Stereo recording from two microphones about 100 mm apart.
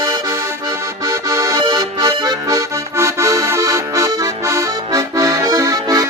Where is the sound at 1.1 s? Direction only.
30° right (ahead or behind).